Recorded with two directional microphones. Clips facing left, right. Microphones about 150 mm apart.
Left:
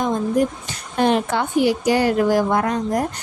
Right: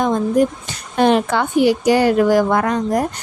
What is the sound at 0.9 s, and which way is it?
A woman's voice, 85° right.